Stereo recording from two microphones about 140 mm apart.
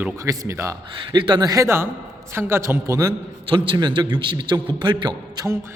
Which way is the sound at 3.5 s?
35° right (ahead or behind).